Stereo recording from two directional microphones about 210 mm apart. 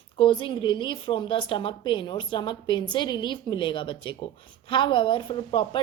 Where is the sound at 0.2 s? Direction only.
25° left (ahead or behind).